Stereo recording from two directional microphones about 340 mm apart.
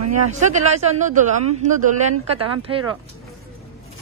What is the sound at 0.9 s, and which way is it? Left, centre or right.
Speech, right.